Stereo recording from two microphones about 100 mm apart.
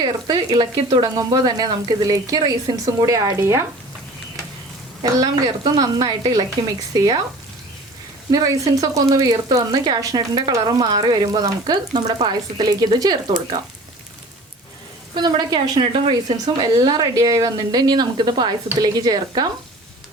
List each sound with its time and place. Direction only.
0.0 s speech: 45° right (ahead or behind)
5.2 s speech: 40° right (ahead or behind)
8.3 s speech: 35° right (ahead or behind)
15.1 s speech: 45° right (ahead or behind)
16.6 s speech: 40° right (ahead or behind)